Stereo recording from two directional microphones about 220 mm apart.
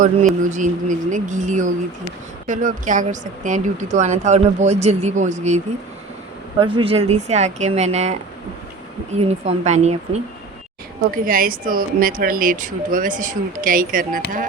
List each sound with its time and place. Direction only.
0.5 s speech: 35° right (ahead or behind)
6.6 s speech: 25° right (ahead or behind); by 14.4 s 40° right (ahead or behind)